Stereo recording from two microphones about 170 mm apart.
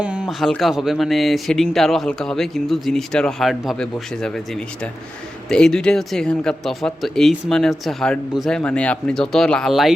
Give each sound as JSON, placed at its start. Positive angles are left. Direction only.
{"t": 0.0, "sound": "speech", "side_deg": -5}
{"t": 5.5, "sound": "speech", "side_deg": 5}